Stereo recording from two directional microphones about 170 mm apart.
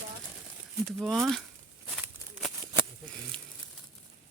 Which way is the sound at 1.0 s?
Centre (ahead or behind).